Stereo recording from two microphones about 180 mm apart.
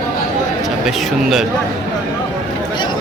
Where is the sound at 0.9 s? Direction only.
Centre (ahead or behind).